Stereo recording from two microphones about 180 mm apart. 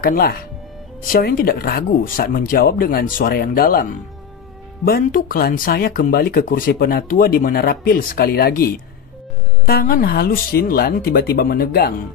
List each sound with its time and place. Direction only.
0.0 s speech: 55° left (ahead or behind)
9.7 s speech: 55° left (ahead or behind)